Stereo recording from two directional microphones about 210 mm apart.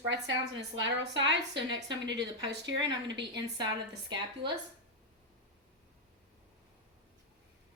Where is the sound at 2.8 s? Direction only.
20° right (ahead or behind).